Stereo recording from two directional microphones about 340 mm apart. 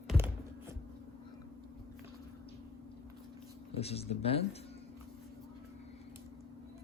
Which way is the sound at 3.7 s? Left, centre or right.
Centre.